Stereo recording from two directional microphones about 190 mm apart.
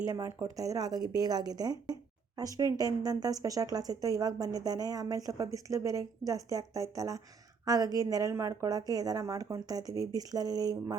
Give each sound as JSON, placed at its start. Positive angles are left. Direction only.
{"t": 0.1, "sound": "a woman's voice", "side_deg": -15}